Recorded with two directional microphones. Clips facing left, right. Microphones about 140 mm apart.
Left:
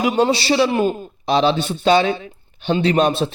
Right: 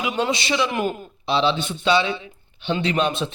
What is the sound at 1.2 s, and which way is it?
A man's voice, 45° left (ahead or behind).